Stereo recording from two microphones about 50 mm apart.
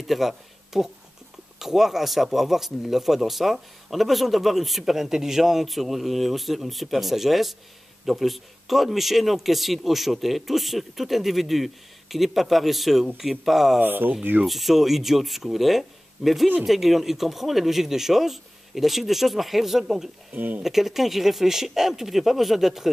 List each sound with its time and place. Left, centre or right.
0.0 s speech: centre
13.7 s speech: right
14.4 s speech: centre
20.3 s speech: right
20.6 s speech: centre